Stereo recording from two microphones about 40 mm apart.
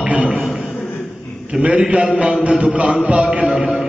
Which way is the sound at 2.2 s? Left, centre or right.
Right.